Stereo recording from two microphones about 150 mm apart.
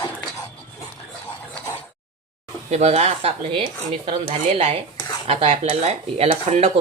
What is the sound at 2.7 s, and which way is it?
Speech, 45° right (ahead or behind).